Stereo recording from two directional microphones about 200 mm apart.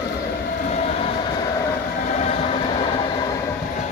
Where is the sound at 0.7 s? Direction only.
35° left (ahead or behind).